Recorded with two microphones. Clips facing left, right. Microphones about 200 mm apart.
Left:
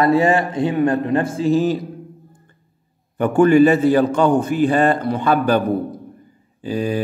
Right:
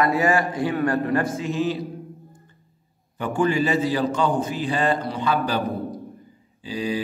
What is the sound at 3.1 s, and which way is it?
A man's voice, 55° left (ahead or behind).